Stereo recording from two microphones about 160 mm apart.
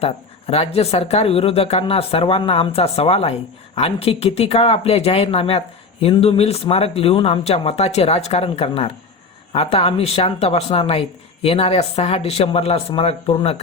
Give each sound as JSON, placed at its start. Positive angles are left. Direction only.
{"t": 0.0, "sound": "speech", "side_deg": 40}